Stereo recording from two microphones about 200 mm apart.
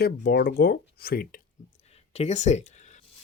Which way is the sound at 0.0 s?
55° left (ahead or behind).